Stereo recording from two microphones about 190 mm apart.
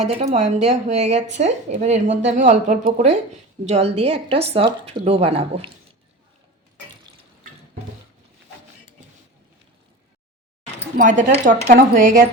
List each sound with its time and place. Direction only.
0.1 s speech: 35° right (ahead or behind)
10.9 s a woman's voice: 45° right (ahead or behind)